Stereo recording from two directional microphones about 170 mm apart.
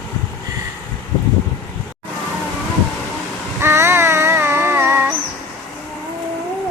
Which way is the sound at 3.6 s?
15° right (ahead or behind).